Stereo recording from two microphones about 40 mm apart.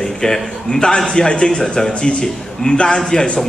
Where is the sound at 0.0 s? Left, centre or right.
Centre.